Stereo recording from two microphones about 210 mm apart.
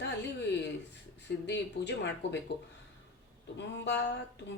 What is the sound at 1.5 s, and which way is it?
Speech, 55° left (ahead or behind).